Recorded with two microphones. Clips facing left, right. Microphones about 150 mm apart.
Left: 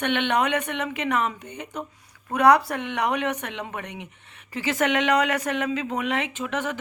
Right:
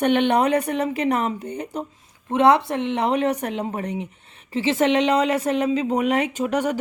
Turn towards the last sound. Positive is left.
turn(degrees=-40)  # may be behind; listen again after turning